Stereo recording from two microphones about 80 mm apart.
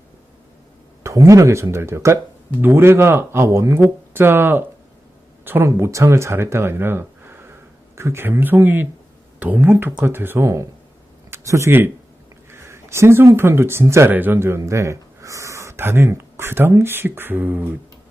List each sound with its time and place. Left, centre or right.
1.0 s speech: right